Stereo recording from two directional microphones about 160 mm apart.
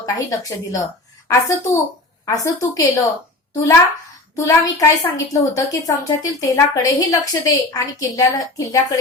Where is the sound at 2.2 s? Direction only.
20° left (ahead or behind).